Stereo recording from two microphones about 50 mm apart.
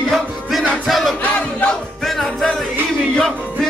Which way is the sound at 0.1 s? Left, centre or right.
Centre.